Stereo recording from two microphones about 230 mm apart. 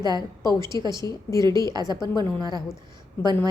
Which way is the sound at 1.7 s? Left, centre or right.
Centre.